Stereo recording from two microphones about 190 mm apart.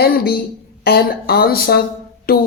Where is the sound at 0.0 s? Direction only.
55° left (ahead or behind).